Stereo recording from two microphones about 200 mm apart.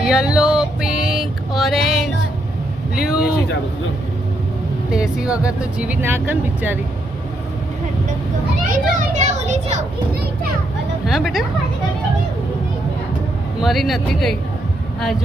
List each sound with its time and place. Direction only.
0.0 s music: 5° right (ahead or behind)
2.9 s speech: 5° right (ahead or behind)
4.9 s speech: 5° right (ahead or behind)
8.7 s children playing: 45° right (ahead or behind)
11.0 s a woman's voice: centre (ahead or behind)
13.6 s speech: centre (ahead or behind)